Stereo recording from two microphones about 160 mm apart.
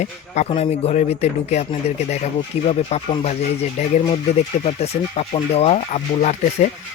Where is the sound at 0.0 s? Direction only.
40° left (ahead or behind).